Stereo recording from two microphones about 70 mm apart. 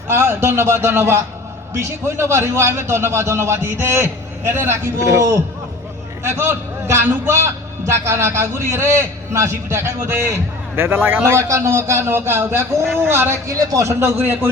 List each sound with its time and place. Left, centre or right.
0.1 s a man's voice: right
6.2 s a man's voice: right
13.5 s a man's voice: right